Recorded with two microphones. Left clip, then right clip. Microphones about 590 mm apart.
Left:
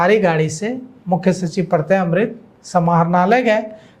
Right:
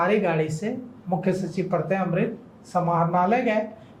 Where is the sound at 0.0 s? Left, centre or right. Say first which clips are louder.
Left 8 dB; left.